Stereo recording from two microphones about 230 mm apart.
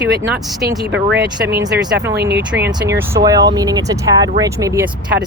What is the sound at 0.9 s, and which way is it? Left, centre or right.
Speech, right.